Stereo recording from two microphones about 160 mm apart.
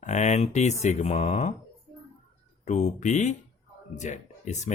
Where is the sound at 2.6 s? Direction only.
45° left (ahead or behind).